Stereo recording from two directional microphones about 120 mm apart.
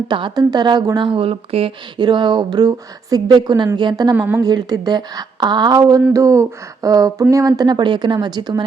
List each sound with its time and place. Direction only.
0.1 s a woman's voice: 40° right (ahead or behind)
2.0 s speech: 40° right (ahead or behind)
4.1 s a woman's voice: 15° right (ahead or behind)
4.4 s speech: 35° right (ahead or behind)